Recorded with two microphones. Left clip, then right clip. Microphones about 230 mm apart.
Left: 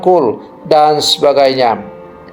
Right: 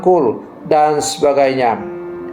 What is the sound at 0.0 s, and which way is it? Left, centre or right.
A man's voice, left.